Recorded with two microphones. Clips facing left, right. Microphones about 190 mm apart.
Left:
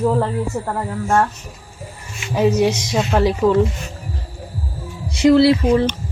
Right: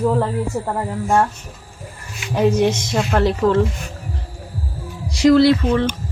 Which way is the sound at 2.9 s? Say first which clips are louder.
Left 1 dB; centre (ahead or behind).